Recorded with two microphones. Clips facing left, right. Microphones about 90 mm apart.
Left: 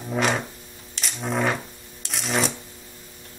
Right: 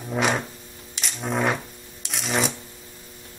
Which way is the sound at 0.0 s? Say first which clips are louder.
Even; centre (ahead or behind).